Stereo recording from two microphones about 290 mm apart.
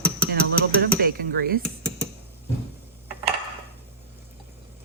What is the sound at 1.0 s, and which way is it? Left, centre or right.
Speech, right.